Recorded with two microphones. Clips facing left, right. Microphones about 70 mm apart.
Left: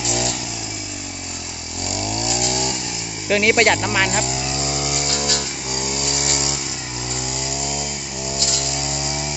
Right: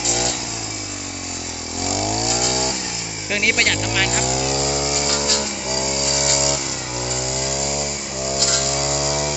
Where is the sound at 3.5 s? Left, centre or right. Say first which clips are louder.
Left 4 dB; left.